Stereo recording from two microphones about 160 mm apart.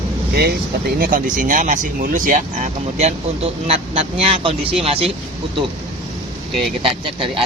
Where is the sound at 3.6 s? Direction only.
40° right (ahead or behind).